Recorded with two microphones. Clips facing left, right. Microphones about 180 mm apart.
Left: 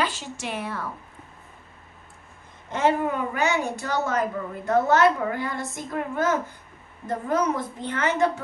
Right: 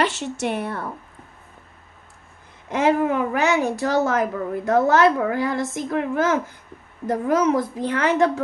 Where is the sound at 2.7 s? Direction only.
90° right.